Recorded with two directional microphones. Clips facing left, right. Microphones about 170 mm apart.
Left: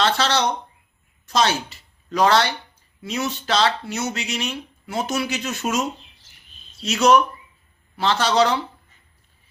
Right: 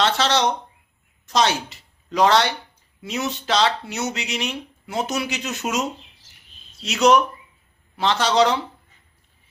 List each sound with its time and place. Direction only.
0.0 s speech: 20° right (ahead or behind)
6.8 s speech: 20° right (ahead or behind)